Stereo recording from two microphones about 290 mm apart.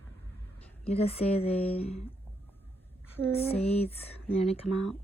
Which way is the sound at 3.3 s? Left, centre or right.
Left.